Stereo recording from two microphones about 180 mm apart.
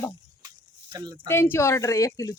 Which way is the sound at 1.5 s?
15° left (ahead or behind).